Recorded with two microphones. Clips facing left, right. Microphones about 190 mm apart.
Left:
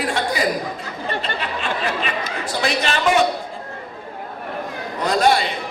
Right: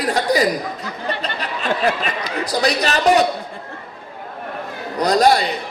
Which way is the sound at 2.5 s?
40° right (ahead or behind).